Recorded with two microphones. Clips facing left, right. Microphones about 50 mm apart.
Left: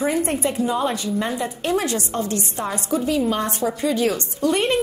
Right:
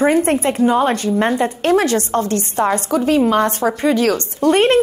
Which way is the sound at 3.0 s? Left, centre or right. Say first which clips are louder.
Right 7 dB; right.